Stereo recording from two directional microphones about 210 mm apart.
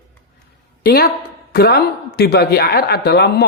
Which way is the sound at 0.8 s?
45° left (ahead or behind).